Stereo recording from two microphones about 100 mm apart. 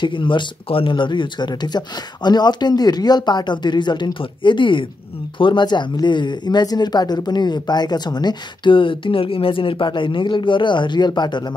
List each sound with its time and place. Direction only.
0.0 s speech: 55° left (ahead or behind)